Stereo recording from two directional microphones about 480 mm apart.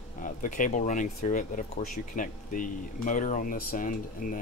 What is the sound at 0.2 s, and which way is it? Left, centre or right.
Speech, centre.